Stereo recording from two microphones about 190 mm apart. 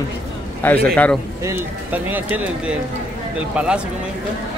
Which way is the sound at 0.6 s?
10° left (ahead or behind).